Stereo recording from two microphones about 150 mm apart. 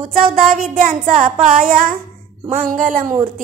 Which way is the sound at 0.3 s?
60° right (ahead or behind).